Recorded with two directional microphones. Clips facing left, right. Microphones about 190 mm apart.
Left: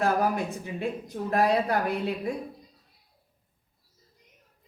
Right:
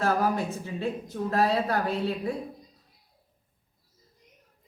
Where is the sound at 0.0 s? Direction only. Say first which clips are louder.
Even; 15° left (ahead or behind).